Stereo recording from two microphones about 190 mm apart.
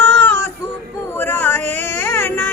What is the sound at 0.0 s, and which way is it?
Music, 10° left (ahead or behind).